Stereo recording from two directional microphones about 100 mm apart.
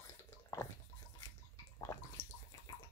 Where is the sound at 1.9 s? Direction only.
30° left (ahead or behind).